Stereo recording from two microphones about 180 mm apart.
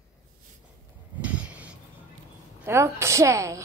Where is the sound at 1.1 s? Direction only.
10° right (ahead or behind).